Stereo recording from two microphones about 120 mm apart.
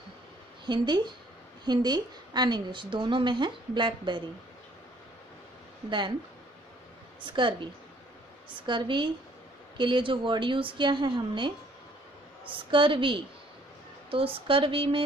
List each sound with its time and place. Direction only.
0.7 s a woman's voice: 40° right (ahead or behind)
5.9 s speech: 40° right (ahead or behind)
7.2 s a woman's voice: 40° right (ahead or behind)